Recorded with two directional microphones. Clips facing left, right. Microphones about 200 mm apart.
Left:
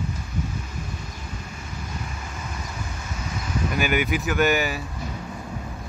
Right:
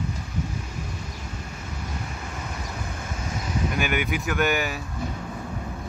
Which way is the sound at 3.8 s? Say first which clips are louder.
Left 6 dB; centre (ahead or behind).